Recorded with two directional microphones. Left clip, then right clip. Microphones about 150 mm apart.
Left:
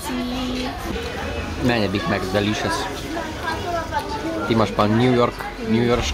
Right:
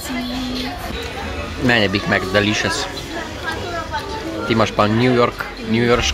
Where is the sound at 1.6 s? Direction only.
5° right (ahead or behind).